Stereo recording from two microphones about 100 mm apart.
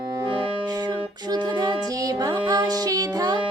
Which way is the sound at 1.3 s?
45° right (ahead or behind).